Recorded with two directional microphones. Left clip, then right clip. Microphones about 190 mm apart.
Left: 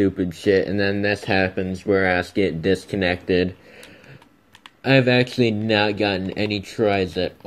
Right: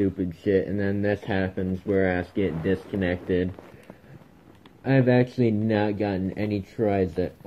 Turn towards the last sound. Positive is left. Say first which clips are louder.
# left 4 dB
turn(degrees=20)  # may be behind; listen again after turning